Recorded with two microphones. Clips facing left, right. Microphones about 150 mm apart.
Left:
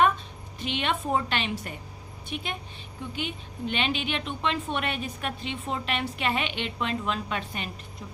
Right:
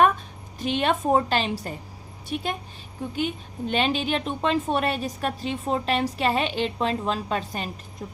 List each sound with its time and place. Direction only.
0.6 s a woman's voice: 40° right (ahead or behind)